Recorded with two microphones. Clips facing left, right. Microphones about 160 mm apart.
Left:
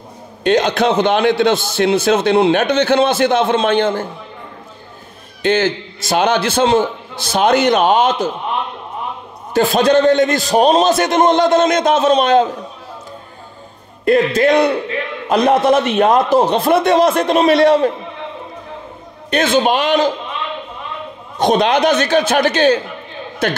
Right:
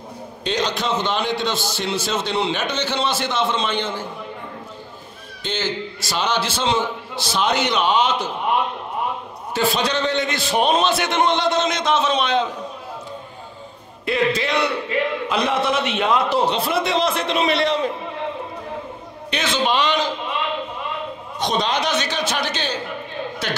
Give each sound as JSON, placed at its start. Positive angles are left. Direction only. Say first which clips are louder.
{"t": 0.4, "sound": "a man's voice", "louder": "left 9 dB", "side_deg": 55}
{"t": 5.4, "sound": "a man's voice", "louder": "left 10 dB", "side_deg": 55}
{"t": 9.5, "sound": "a man's voice", "louder": "left 9 dB", "side_deg": 50}
{"t": 14.0, "sound": "a man's voice", "louder": "left 8 dB", "side_deg": 50}
{"t": 19.3, "sound": "a man's voice", "louder": "left 7 dB", "side_deg": 50}
{"t": 21.4, "sound": "a man's voice", "louder": "left 9 dB", "side_deg": 55}